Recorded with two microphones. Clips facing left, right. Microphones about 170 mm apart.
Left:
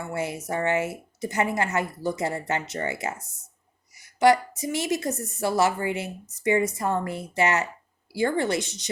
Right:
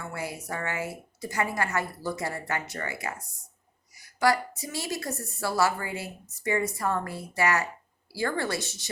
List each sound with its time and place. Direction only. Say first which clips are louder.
0.1 s a woman's voice: left 8 dB; 25° left (ahead or behind)